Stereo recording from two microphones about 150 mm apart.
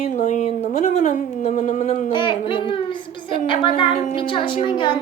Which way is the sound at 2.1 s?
35° left (ahead or behind).